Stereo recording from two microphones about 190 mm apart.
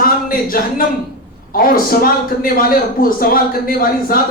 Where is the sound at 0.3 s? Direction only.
50° left (ahead or behind).